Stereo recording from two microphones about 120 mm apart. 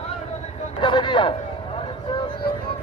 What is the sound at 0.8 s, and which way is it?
Speech, 40° left (ahead or behind).